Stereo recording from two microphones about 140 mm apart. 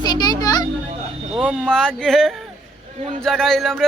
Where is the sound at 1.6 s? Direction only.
5° left (ahead or behind).